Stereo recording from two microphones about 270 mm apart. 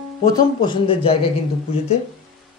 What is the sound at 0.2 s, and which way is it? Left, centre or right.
Speech, centre.